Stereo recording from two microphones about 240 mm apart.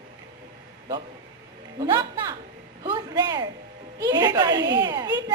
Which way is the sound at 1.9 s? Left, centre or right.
Centre.